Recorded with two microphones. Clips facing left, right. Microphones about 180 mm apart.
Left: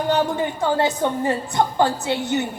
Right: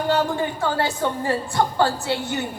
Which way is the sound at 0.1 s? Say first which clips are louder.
Left 1 dB; 20° left (ahead or behind).